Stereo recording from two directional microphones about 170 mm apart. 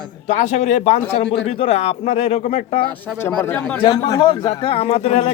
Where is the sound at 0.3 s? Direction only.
45° left (ahead or behind).